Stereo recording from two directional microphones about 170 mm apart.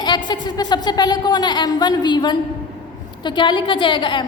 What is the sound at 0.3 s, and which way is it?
A woman's voice, 25° left (ahead or behind).